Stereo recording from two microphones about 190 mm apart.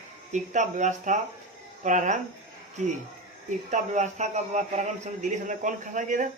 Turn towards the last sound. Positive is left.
turn(degrees=-40)  # may be behind; listen again after turning